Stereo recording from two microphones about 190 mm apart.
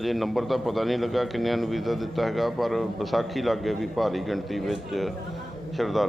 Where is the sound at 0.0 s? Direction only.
Centre (ahead or behind).